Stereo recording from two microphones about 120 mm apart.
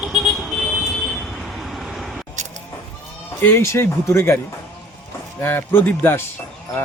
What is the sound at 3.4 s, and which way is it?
Speech, 20° left (ahead or behind).